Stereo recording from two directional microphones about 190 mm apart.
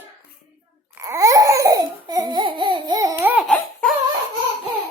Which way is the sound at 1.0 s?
15° right (ahead or behind).